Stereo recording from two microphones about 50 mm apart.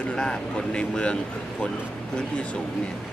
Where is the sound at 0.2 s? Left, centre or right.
Centre.